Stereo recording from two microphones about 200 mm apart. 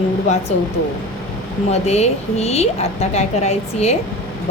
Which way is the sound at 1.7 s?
35° left (ahead or behind).